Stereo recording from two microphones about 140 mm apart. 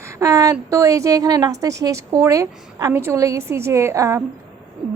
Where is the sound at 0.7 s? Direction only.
25° right (ahead or behind).